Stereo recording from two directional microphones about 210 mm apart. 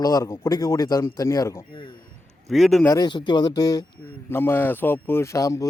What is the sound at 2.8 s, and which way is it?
A man's voice, 15° left (ahead or behind).